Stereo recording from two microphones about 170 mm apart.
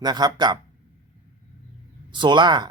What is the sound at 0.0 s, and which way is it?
Speech, 25° right (ahead or behind).